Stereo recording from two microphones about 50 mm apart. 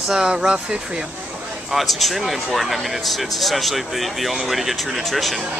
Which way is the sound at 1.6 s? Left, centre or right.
Centre.